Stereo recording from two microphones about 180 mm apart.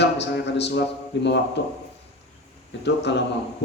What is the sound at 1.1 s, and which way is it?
Speech, 80° left.